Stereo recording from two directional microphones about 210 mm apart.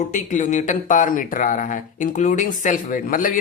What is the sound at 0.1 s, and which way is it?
Speech, 35° left (ahead or behind).